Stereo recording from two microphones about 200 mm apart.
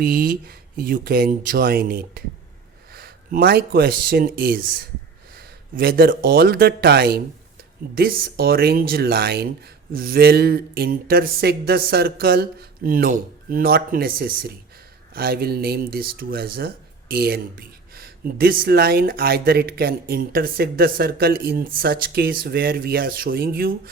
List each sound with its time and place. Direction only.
0.0 s speech: 45° right (ahead or behind)